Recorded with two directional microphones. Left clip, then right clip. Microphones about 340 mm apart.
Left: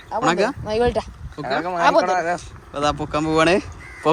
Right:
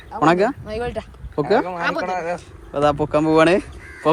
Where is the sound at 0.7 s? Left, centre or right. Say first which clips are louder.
Left 6 dB; left.